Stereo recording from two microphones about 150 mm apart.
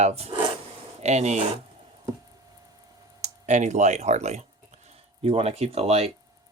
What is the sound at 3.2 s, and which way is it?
Speech, 50° right (ahead or behind).